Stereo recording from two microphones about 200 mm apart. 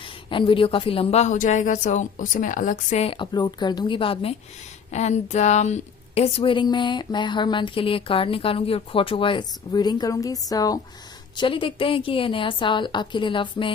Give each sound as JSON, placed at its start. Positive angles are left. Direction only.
{"t": 0.0, "sound": "a woman's voice", "side_deg": 25}